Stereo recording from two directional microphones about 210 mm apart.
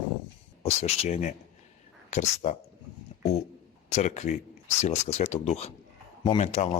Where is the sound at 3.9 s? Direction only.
35° left (ahead or behind).